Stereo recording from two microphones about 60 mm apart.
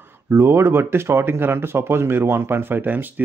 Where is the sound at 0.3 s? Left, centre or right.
Right.